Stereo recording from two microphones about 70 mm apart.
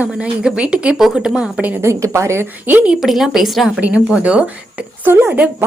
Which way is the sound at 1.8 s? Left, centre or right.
Right.